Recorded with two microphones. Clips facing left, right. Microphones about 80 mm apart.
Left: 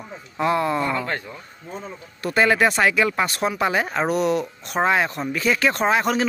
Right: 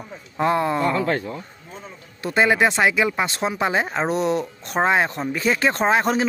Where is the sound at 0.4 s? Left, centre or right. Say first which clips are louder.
Right 1 dB; right.